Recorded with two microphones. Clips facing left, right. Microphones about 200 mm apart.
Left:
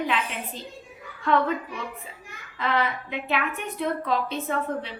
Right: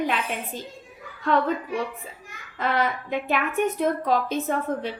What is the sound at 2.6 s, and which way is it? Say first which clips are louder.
A woman's voice: right 1 dB; 45° right (ahead or behind).